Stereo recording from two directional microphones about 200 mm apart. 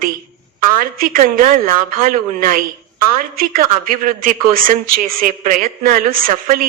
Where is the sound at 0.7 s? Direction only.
45° right (ahead or behind).